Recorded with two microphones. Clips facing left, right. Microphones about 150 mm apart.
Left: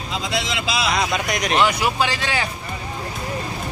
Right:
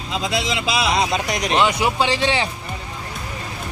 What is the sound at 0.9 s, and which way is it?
Speech, 30° right (ahead or behind).